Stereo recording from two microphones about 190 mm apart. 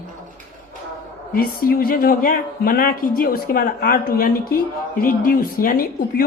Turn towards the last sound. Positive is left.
turn(degrees=50)  # may be behind; listen again after turning